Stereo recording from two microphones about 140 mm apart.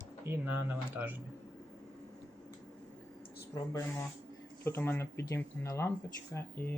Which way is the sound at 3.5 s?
25° left (ahead or behind).